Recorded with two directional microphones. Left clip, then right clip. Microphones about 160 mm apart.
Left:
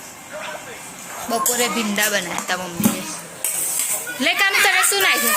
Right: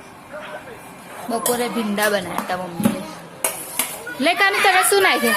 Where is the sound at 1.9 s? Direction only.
25° right (ahead or behind).